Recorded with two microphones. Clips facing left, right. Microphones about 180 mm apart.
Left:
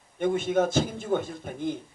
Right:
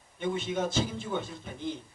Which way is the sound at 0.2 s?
50° left (ahead or behind).